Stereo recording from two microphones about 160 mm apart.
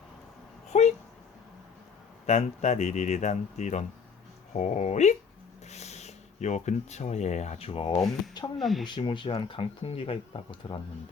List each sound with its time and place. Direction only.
0.7 s a sound: 45° left (ahead or behind)
2.2 s speech: 45° left (ahead or behind)
8.5 s speech: centre (ahead or behind)
8.9 s speech: 30° left (ahead or behind)